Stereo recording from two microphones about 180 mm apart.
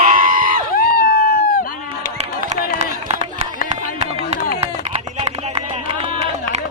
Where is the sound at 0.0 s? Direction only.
50° right (ahead or behind).